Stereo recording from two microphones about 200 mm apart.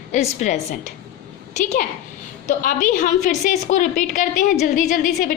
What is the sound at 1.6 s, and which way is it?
A woman's voice, 40° left (ahead or behind).